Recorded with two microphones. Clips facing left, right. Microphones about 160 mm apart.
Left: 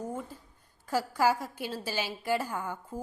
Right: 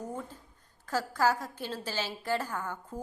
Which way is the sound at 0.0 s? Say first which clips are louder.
Left 2 dB; 10° left (ahead or behind).